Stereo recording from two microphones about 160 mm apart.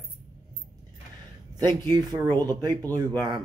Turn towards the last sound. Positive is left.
turn(degrees=-25)  # may be behind; listen again after turning